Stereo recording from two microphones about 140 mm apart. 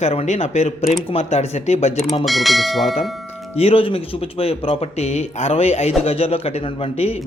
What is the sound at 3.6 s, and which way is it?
A man's voice, 45° left (ahead or behind).